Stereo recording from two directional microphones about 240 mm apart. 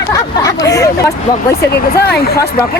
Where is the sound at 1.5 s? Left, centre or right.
Left.